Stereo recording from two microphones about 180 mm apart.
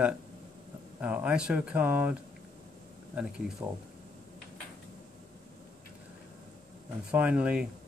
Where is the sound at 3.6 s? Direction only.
20° right (ahead or behind).